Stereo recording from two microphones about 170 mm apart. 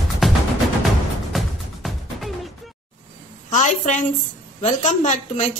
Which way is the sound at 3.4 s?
45° left (ahead or behind).